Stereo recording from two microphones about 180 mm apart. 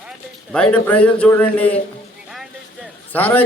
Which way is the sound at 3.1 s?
10° left (ahead or behind).